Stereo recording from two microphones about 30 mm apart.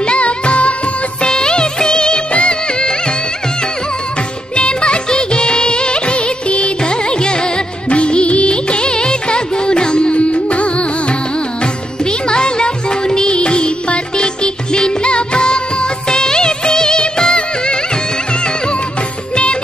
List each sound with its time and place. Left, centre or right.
0.0 s music: left
1.2 s music of bollywood: left
2.3 s music: left
4.6 s music of bollywood: left
6.8 s music: left
10.1 s music: left
18.9 s music of bollywood: left